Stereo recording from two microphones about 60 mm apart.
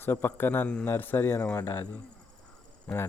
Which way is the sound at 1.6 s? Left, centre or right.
Left.